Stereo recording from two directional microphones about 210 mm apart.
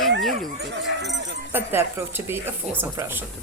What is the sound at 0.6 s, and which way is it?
Speech, 55° right (ahead or behind).